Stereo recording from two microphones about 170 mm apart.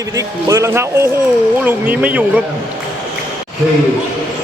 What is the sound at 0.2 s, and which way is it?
A man's voice, 20° right (ahead or behind).